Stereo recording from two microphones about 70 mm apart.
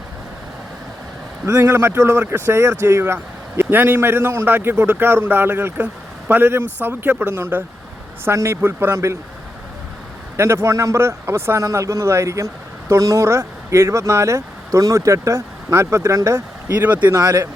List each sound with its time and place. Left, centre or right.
1.5 s a man's voice: right
3.7 s a man's voice: right
10.3 s speech: right
16.8 s speech: right
17.2 s speech: right